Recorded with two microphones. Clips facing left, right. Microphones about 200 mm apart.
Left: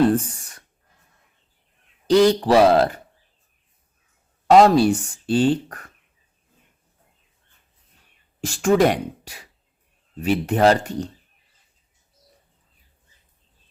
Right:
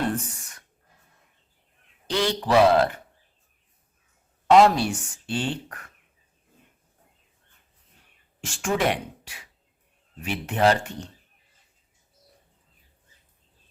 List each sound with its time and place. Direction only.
0.0 s speech: 35° left (ahead or behind)
2.0 s speech: 35° left (ahead or behind)
4.4 s speech: 35° left (ahead or behind)
8.4 s speech: 40° left (ahead or behind)